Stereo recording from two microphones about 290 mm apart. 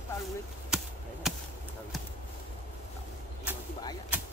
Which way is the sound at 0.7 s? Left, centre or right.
Centre.